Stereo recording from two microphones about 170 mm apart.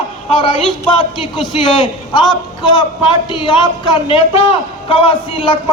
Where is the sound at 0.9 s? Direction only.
25° left (ahead or behind).